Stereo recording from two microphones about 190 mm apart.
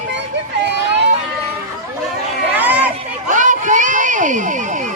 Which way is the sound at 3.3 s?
40° right (ahead or behind).